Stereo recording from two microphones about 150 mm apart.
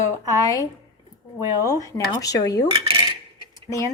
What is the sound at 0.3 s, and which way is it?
Speech, 25° left (ahead or behind).